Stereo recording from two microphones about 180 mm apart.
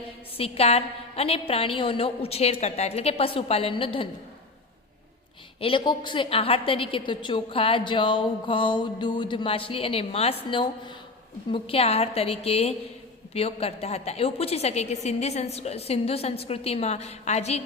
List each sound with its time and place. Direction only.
0.3 s a woman's voice: 35° left (ahead or behind)
5.5 s a woman's voice: 30° left (ahead or behind)